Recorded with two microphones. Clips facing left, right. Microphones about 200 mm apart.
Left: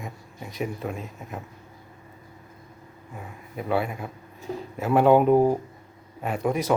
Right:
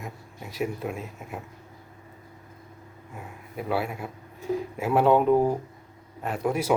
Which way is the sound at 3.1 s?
Centre (ahead or behind).